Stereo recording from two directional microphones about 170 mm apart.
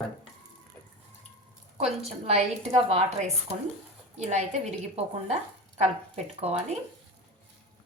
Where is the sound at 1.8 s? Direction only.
40° right (ahead or behind).